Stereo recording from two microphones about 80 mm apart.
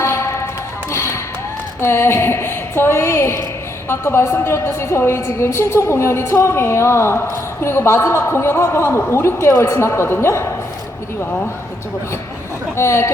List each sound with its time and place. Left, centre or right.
0.0 s a sound: left
0.9 s music: left
1.8 s a woman's voice: left
12.7 s a woman's voice: left